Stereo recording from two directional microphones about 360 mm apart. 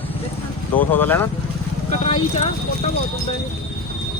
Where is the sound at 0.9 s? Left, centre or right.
Centre.